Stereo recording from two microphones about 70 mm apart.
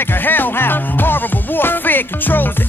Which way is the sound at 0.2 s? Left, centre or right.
Left.